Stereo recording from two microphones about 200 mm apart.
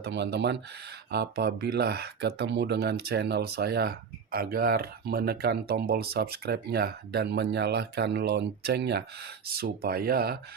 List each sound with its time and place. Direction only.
0.0 s speech: 55° right (ahead or behind)